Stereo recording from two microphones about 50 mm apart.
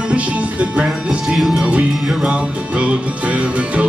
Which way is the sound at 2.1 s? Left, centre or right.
Centre.